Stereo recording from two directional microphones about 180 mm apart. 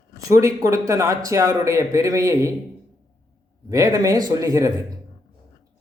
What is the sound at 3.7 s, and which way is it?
Speech, 20° right (ahead or behind).